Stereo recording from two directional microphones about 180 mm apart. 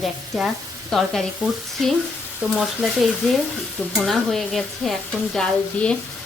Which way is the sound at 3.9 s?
Centre (ahead or behind).